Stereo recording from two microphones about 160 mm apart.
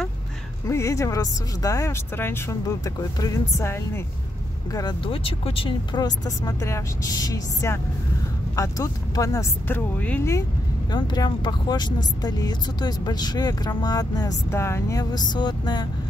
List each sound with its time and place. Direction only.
0.7 s speech: 20° left (ahead or behind)
4.7 s speech: 30° left (ahead or behind); by 10.4 s 15° left (ahead or behind)
10.9 s speech: 25° left (ahead or behind)